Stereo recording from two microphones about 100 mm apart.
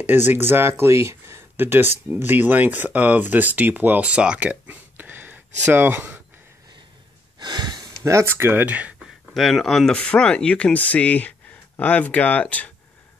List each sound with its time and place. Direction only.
0.0 s speech: 20° right (ahead or behind)
7.3 s a sound: 45° right (ahead or behind)
8.0 s speech: 30° right (ahead or behind)
9.3 s speech: centre (ahead or behind)